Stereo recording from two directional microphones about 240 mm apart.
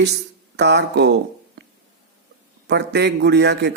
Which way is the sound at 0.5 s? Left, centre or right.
Right.